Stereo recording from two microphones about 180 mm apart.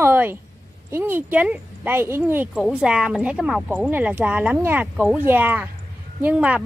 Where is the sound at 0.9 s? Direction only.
10° right (ahead or behind).